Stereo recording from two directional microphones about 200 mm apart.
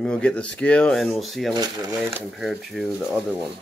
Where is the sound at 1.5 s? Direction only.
20° right (ahead or behind).